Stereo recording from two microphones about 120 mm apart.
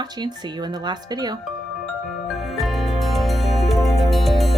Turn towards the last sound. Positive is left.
turn(degrees=0)  # may be behind; listen again after turning